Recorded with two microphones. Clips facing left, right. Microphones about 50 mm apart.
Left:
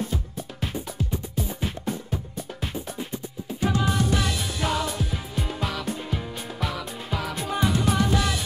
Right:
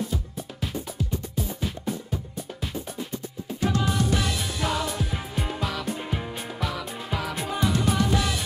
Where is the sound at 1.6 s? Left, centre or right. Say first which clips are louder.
Left 1 dB; left.